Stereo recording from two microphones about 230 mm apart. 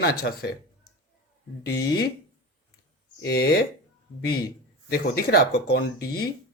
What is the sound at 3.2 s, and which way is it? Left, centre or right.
Speech, left.